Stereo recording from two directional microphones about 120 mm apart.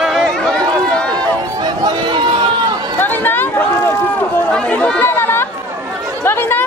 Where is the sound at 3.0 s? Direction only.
15° left (ahead or behind).